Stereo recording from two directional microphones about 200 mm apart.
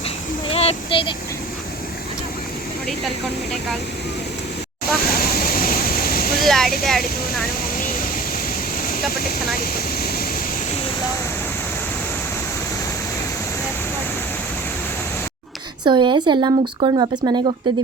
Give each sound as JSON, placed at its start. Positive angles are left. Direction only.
{"t": 0.5, "sound": "a sound", "side_deg": 30}
{"t": 5.0, "sound": "waterfall", "side_deg": 50}
{"t": 6.4, "sound": "a sound", "side_deg": 0}
{"t": 8.8, "sound": "vehicle", "side_deg": 45}
{"t": 9.6, "sound": "speech", "side_deg": 50}
{"t": 15.8, "sound": "speech", "side_deg": -25}